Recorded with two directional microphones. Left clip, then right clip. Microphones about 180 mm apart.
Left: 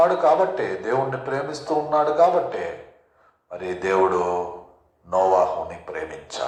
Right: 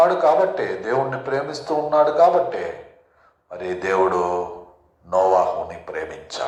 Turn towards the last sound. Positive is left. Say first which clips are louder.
# right 2 dB
turn(degrees=-15)  # may be behind; listen again after turning